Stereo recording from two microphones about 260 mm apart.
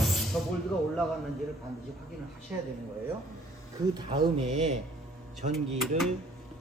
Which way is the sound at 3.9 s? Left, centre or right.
Centre.